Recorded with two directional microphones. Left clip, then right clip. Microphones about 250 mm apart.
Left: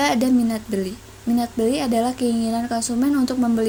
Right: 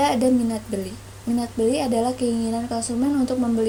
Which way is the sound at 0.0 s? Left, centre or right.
Left.